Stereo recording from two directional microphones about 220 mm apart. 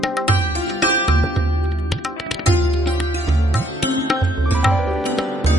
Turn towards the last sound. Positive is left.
turn(degrees=0)  # may be behind; listen again after turning